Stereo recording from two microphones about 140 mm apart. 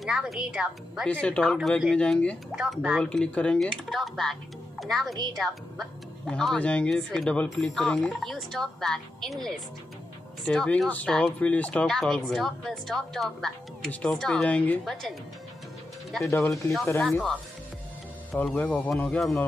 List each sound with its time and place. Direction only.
0.0 s speech: centre (ahead or behind)
2.5 s speech: 5° right (ahead or behind)
3.0 s speech: 5° left (ahead or behind)
5.1 s a woman's voice: 30° right (ahead or behind)
5.4 s speech: centre (ahead or behind)
16.3 s speech: 20° left (ahead or behind)
18.3 s speech: 10° left (ahead or behind)